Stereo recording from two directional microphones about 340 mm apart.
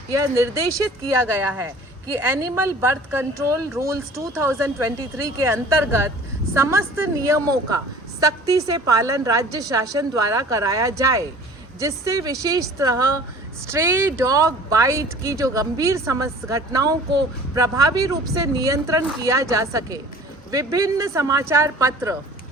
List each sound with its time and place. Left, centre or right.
0.2 s speech: centre
2.2 s speech: centre